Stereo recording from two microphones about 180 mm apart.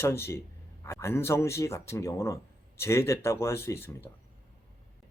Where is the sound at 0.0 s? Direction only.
15° left (ahead or behind).